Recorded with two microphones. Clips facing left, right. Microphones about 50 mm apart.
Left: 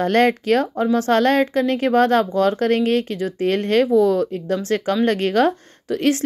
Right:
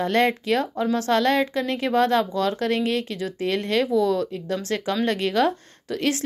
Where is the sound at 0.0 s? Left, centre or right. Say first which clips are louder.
Left 4 dB; left.